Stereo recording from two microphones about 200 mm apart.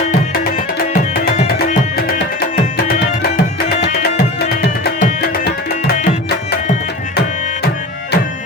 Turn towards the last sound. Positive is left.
turn(degrees=40)  # may be behind; listen again after turning